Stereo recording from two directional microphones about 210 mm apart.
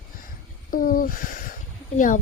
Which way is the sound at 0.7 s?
40° left (ahead or behind).